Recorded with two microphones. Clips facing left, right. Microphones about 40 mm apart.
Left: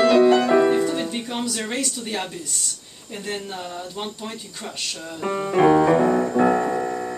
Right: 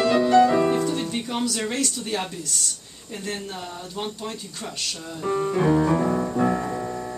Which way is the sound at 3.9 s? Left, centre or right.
Centre.